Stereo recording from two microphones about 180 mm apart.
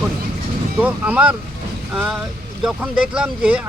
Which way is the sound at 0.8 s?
10° right (ahead or behind).